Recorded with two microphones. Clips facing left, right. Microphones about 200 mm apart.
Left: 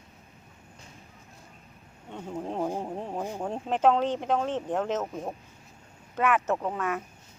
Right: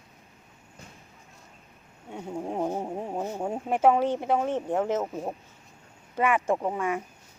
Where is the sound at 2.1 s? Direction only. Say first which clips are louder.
Right 1 dB; 10° right (ahead or behind).